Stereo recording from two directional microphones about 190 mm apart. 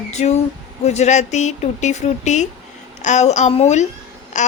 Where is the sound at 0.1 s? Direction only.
35° left (ahead or behind).